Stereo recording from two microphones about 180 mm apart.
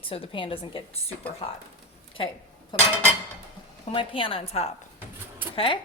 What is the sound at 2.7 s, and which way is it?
A woman's voice, 25° left (ahead or behind).